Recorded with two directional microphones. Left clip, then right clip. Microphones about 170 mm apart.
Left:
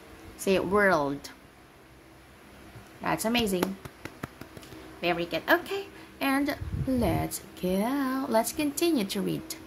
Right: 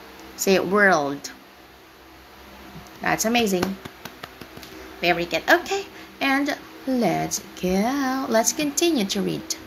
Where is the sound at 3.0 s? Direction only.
40° left (ahead or behind).